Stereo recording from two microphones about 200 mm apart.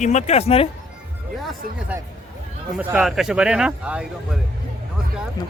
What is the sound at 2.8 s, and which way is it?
A man's voice, 5° right (ahead or behind).